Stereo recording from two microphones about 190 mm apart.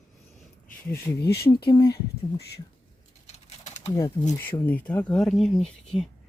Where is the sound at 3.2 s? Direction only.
35° left (ahead or behind).